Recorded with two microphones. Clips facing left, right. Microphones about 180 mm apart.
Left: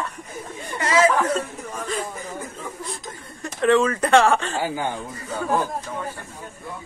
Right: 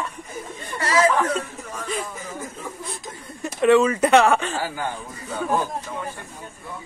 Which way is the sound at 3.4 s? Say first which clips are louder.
Right 2 dB; 15° right (ahead or behind).